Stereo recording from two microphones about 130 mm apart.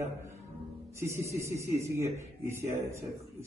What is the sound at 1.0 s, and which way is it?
A man's voice, 20° right (ahead or behind).